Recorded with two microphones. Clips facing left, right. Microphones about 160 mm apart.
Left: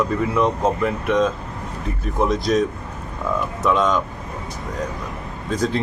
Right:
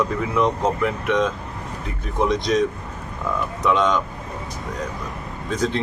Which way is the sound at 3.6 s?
5° left (ahead or behind).